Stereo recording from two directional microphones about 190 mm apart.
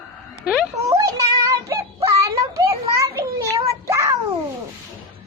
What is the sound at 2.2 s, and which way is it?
Children playing, 15° right (ahead or behind).